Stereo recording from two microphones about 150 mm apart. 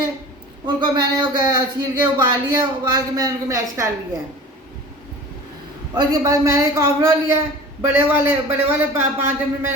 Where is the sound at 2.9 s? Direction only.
25° right (ahead or behind).